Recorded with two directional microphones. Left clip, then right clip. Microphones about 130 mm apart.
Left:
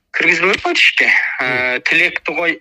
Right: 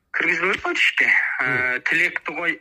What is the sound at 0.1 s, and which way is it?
Speech, 15° left (ahead or behind).